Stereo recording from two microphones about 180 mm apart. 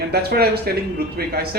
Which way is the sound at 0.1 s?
60° right (ahead or behind).